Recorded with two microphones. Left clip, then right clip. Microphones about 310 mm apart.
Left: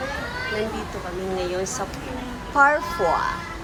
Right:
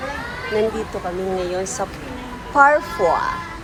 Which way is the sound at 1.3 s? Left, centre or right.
Centre.